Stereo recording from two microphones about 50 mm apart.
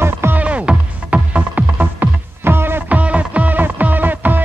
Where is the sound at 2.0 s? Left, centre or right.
Right.